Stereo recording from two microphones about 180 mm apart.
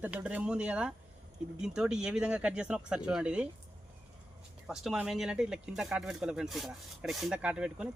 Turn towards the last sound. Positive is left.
turn(degrees=-5)  # may be behind; listen again after turning